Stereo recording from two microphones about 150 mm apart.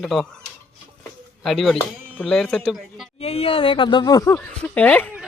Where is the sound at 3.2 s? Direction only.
40° left (ahead or behind); by 4.4 s 25° left (ahead or behind).